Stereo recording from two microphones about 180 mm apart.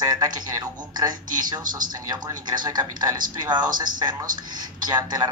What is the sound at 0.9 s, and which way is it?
Speech, 20° right (ahead or behind).